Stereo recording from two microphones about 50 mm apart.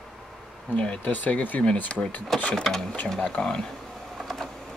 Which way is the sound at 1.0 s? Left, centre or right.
Left.